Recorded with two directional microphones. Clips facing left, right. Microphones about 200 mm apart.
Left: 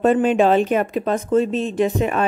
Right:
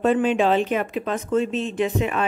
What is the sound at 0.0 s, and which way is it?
Speech, 45° left (ahead or behind).